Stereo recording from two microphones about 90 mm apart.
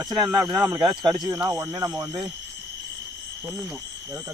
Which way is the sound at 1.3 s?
25° right (ahead or behind).